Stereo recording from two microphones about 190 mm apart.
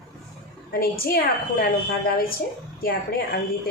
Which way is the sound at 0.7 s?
50° left (ahead or behind).